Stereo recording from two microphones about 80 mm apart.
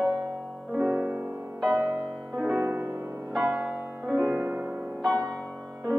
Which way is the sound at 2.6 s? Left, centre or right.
Right.